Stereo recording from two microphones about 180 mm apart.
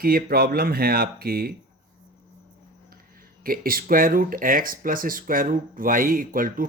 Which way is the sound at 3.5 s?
55° right (ahead or behind).